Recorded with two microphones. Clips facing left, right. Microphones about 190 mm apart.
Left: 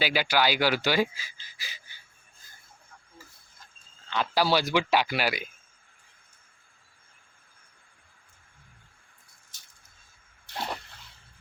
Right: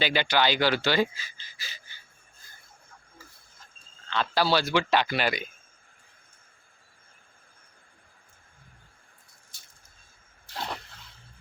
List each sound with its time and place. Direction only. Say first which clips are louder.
0.0 s speech: even; 5° left (ahead or behind)
4.1 s speech: even; 15° left (ahead or behind)